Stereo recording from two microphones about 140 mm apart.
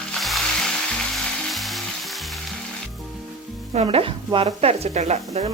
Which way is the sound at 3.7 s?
40° right (ahead or behind).